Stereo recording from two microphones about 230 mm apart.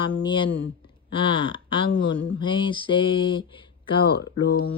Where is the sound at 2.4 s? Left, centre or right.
Left.